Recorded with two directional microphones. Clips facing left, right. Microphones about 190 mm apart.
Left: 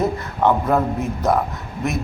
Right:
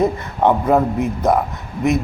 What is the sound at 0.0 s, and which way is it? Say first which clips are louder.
Speech: right 3 dB; 15° right (ahead or behind).